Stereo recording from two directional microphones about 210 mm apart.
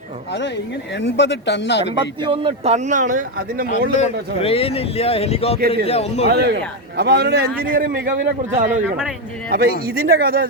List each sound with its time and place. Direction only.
0.3 s speech: 55° left (ahead or behind)
2.0 s a man's voice: 25° right (ahead or behind); by 3.7 s 40° right (ahead or behind)
3.7 s a man's voice: 35° left (ahead or behind)
5.5 s a man's voice: 50° right (ahead or behind)
5.8 s a man's voice: 30° left (ahead or behind)
6.2 s a man's voice: 50° right (ahead or behind)
9.5 s a man's voice: 45° right (ahead or behind)